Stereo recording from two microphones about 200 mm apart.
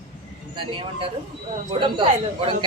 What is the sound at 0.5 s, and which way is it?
Speech, 25° right (ahead or behind).